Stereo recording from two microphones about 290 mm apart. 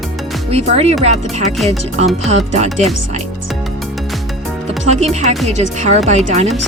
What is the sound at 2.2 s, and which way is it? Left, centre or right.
Speech, right.